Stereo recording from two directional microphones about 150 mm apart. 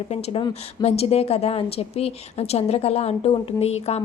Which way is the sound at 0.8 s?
40° left (ahead or behind).